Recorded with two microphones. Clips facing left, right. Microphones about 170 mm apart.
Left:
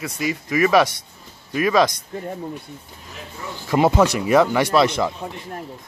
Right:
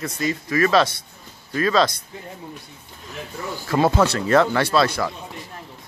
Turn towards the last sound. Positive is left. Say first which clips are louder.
# left 2 dB
turn(degrees=20)  # may be behind; listen again after turning